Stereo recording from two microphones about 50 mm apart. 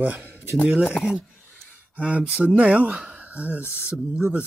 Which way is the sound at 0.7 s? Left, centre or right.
Centre.